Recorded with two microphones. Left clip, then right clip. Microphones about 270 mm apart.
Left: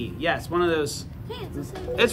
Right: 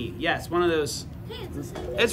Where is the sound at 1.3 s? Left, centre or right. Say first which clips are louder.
Left 3 dB; centre.